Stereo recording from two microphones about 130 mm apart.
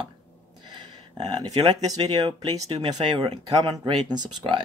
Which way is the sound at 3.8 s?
35° right (ahead or behind).